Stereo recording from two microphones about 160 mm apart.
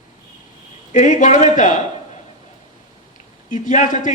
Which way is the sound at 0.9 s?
50° left (ahead or behind).